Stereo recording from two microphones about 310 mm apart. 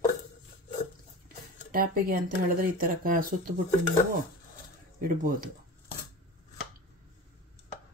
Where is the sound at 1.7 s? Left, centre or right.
Right.